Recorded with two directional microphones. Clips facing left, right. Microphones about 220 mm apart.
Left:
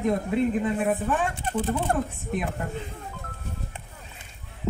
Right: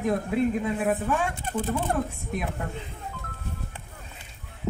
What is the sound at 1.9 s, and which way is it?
Speech, 50° left (ahead or behind).